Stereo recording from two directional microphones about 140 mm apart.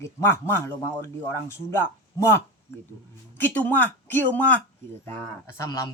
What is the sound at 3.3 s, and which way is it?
Speech, 10° left (ahead or behind).